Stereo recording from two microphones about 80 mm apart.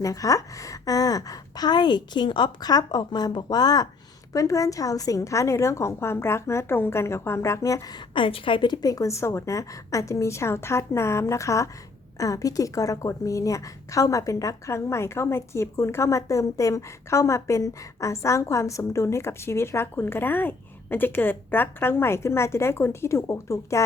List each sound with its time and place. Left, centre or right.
0.0 s a woman's voice: left
4.3 s a woman's voice: left
8.1 s a woman's voice: left